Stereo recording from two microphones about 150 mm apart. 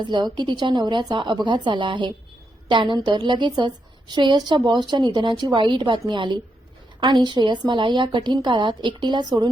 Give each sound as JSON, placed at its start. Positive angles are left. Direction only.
{"t": 0.0, "sound": "a woman's voice", "side_deg": -30}